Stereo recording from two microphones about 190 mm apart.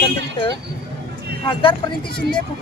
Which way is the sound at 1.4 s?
25° left (ahead or behind).